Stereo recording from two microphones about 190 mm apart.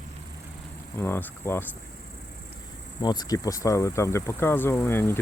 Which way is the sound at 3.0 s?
20° left (ahead or behind).